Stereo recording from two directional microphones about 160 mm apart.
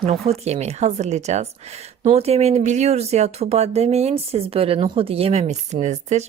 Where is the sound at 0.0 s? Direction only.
40° right (ahead or behind).